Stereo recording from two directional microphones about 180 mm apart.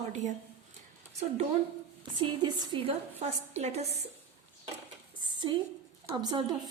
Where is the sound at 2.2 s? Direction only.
25° right (ahead or behind).